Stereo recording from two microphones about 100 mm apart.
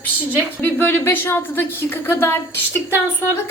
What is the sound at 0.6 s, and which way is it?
A woman's voice, 20° left (ahead or behind).